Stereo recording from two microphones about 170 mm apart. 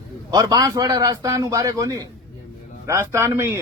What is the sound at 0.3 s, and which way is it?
A man's voice, 25° right (ahead or behind).